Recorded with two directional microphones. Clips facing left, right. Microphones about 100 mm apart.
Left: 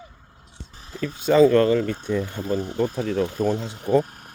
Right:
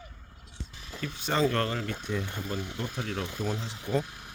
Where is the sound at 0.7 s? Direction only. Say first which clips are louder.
Left 8 dB; 40° left (ahead or behind).